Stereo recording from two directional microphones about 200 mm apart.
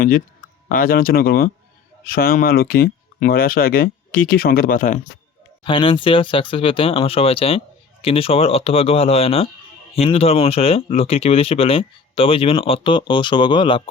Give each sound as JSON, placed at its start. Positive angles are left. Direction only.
{"t": 0.7, "sound": "speech", "side_deg": 45}
{"t": 5.6, "sound": "speech", "side_deg": 25}